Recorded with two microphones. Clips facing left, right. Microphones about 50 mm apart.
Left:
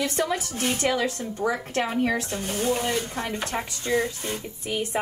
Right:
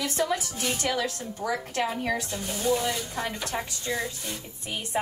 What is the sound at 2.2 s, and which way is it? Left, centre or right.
A woman's voice, left.